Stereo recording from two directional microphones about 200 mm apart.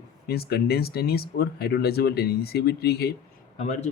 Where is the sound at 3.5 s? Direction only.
35° left (ahead or behind).